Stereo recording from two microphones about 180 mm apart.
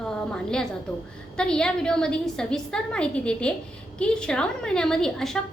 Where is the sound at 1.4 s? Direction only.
5° left (ahead or behind).